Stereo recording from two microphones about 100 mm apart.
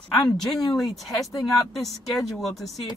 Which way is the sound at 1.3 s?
35° left (ahead or behind).